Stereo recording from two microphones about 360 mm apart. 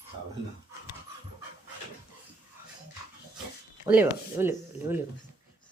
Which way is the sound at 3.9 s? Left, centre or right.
Centre.